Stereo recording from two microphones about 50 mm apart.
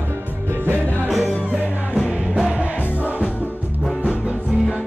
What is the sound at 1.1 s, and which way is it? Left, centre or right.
Music, centre.